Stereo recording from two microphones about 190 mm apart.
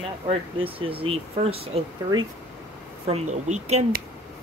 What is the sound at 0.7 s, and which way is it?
Speech, 30° right (ahead or behind).